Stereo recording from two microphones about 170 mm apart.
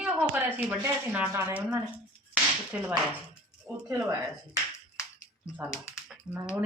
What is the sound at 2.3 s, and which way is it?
Whip, 5° right (ahead or behind).